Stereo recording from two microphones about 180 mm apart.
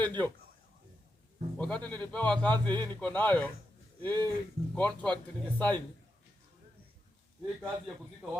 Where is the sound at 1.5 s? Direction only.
5° left (ahead or behind).